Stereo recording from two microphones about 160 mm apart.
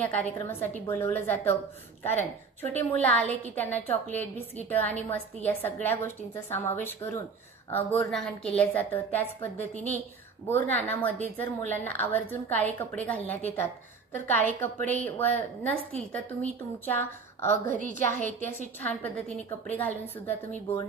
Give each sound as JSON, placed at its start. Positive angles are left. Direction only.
{"t": 0.0, "sound": "a woman's voice", "side_deg": 10}
{"t": 17.7, "sound": "a woman's voice", "side_deg": -55}
{"t": 18.2, "sound": "a woman's voice", "side_deg": 10}